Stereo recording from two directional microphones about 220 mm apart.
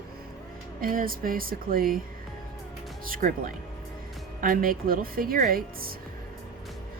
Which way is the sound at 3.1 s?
40° right (ahead or behind).